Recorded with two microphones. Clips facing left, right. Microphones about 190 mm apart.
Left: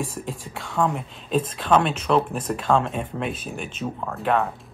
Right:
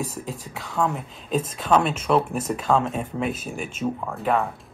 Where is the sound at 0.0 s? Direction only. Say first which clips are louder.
Left 1 dB; centre (ahead or behind).